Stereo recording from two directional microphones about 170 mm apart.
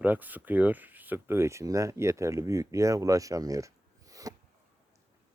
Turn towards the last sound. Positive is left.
turn(degrees=-20)  # may be behind; listen again after turning